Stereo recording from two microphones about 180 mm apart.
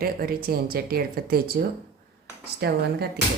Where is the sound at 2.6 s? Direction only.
60° right (ahead or behind).